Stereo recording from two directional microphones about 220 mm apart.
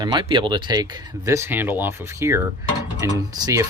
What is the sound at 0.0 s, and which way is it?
Speech, 20° right (ahead or behind).